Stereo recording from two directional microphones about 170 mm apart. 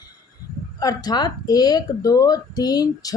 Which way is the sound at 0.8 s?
20° left (ahead or behind).